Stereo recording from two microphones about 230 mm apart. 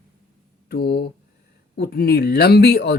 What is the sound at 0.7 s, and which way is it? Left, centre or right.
Speech, left.